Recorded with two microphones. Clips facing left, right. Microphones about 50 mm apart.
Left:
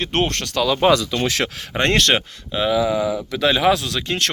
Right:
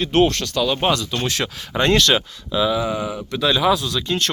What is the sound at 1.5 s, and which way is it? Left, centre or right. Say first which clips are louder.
Speech: right 4 dB; left.